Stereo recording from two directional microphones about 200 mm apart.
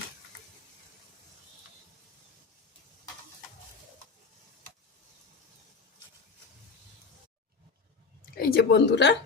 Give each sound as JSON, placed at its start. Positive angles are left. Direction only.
{"t": 8.4, "sound": "a woman's voice", "side_deg": 50}